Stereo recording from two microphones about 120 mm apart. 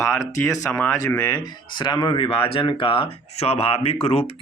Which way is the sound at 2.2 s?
55° left (ahead or behind).